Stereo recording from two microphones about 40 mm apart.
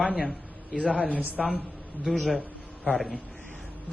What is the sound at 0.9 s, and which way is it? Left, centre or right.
Speech, left.